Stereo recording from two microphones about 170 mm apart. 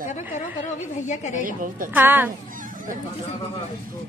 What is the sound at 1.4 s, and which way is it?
Speech, 55° right (ahead or behind).